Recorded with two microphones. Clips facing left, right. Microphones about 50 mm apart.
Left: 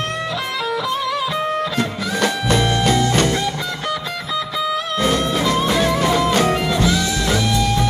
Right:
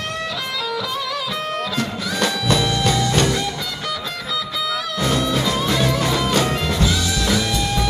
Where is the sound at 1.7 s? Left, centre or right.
Left.